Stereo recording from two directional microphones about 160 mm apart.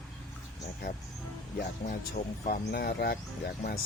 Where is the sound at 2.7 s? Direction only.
75° left (ahead or behind).